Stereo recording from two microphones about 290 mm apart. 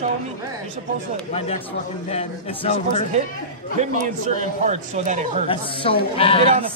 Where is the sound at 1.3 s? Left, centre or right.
Left.